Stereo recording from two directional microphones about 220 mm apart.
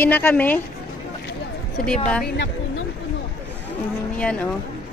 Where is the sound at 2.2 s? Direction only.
50° left (ahead or behind).